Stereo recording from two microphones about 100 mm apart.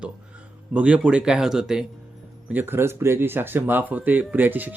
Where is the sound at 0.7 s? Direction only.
15° right (ahead or behind).